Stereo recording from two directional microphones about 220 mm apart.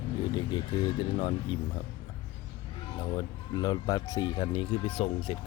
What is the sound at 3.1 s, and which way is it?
Speech, 20° left (ahead or behind).